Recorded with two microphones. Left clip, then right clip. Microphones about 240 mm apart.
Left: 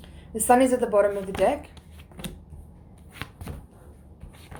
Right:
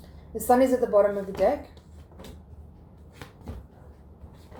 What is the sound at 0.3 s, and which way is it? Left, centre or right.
A woman's voice, left.